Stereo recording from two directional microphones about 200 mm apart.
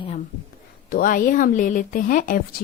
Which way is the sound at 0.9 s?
45° left (ahead or behind).